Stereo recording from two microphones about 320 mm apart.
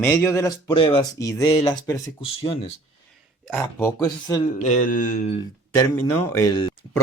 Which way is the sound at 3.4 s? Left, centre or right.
Centre.